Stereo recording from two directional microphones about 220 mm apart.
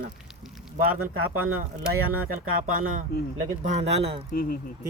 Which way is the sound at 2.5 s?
40° right (ahead or behind).